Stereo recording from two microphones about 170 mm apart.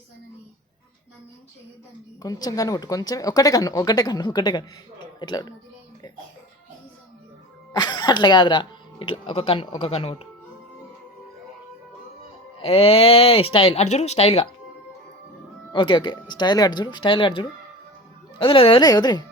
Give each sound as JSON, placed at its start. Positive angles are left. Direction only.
{"t": 2.2, "sound": "speech", "side_deg": 20}
{"t": 7.7, "sound": "speech", "side_deg": 25}
{"t": 12.6, "sound": "speech", "side_deg": 35}
{"t": 15.7, "sound": "speech", "side_deg": 30}